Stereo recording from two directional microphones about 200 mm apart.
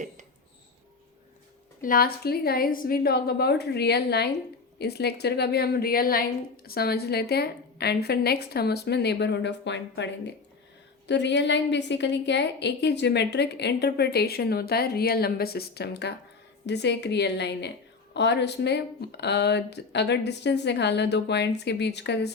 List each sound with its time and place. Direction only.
1.8 s a woman's voice: 45° left (ahead or behind)